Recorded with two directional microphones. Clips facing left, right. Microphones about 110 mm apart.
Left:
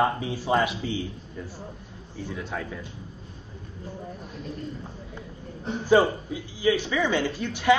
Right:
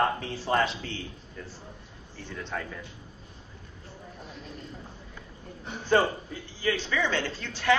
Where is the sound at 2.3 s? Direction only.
10° left (ahead or behind).